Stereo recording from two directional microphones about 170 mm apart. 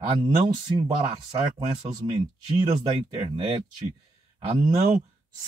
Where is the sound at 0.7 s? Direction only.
25° right (ahead or behind).